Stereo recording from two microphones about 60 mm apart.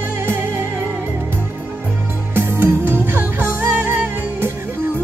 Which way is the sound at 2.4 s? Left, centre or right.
Right.